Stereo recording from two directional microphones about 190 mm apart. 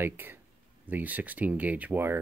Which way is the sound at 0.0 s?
10° right (ahead or behind).